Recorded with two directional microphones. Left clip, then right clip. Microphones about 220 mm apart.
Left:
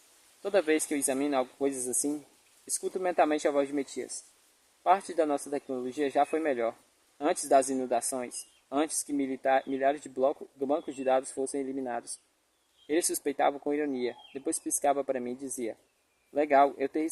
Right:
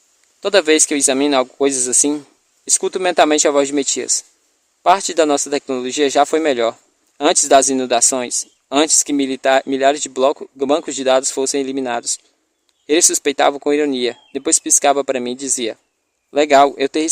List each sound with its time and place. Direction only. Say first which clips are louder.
0.4 s speech: right 14 dB; 50° right (ahead or behind)